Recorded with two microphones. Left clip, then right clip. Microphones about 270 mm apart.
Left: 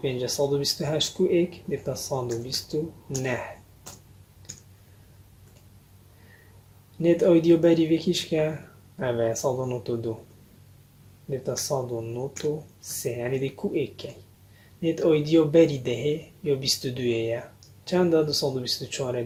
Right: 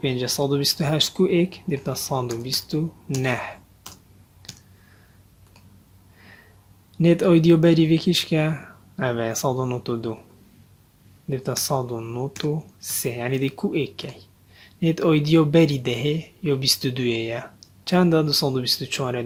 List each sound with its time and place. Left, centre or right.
0.0 s speech: right
4.4 s clicking: right
7.0 s speech: right
11.3 s speech: right